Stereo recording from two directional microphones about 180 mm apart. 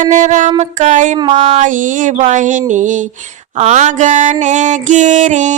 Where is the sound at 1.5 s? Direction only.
45° right (ahead or behind).